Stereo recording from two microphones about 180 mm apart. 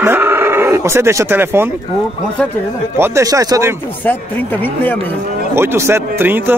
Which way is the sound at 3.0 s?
15° right (ahead or behind).